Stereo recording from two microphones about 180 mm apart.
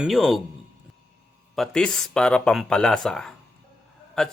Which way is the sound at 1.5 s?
5° left (ahead or behind).